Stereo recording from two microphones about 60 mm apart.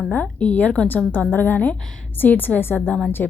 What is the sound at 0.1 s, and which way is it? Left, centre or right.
A woman's voice, left.